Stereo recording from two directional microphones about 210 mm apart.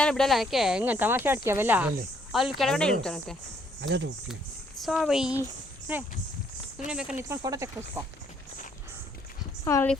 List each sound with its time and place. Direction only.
0.0 s speech: 5° left (ahead or behind)
3.8 s speech: 55° right (ahead or behind)
4.8 s speech: centre (ahead or behind)
6.8 s speech: 5° right (ahead or behind)
9.6 s speech: 10° left (ahead or behind)